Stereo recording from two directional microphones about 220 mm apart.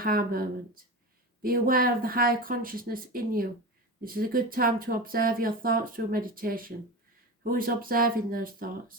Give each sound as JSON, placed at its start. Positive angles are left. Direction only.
{"t": 0.0, "sound": "speech", "side_deg": -40}